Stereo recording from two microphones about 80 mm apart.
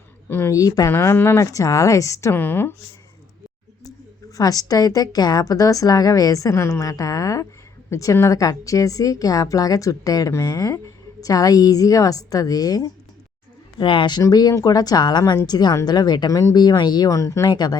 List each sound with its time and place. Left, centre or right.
0.3 s speech: left
0.5 s a woman's voice: left
0.9 s speech: left
2.3 s speech: left
4.4 s a woman's voice: left
13.7 s speech: left
14.2 s a woman's voice: left
17.1 s a woman's voice: left